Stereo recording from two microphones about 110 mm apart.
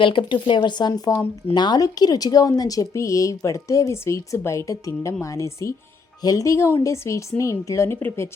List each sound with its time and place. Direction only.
0.0 s a woman's voice: 50° left (ahead or behind); by 8.3 s 20° left (ahead or behind)